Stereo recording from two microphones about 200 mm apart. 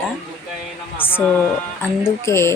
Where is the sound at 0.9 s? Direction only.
10° left (ahead or behind).